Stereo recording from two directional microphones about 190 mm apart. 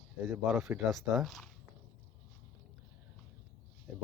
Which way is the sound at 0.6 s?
Centre (ahead or behind).